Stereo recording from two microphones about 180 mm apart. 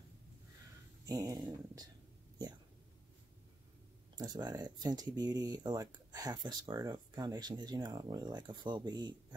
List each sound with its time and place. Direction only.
1.0 s speech: 20° right (ahead or behind)
4.1 s speech: 20° right (ahead or behind)